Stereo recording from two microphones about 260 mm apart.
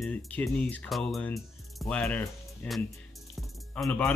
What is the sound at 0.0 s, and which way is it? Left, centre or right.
Speech, centre.